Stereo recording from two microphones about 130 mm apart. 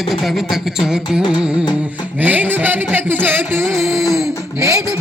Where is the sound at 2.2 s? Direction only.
10° right (ahead or behind).